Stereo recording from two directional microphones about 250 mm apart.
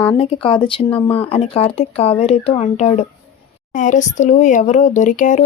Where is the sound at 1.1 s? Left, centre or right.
Left.